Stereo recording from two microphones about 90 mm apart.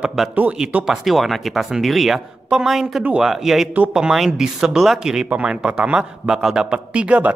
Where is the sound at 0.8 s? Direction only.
5° right (ahead or behind).